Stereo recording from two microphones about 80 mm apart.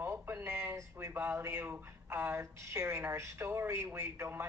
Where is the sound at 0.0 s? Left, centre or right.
Right.